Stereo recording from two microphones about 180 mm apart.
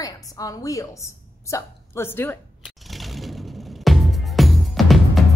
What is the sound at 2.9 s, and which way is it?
Music, centre (ahead or behind).